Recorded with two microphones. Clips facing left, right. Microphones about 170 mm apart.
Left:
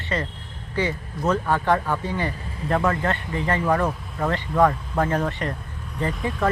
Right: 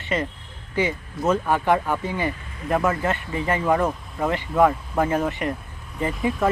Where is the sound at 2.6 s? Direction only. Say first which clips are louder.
Right 1 dB; 30° left (ahead or behind).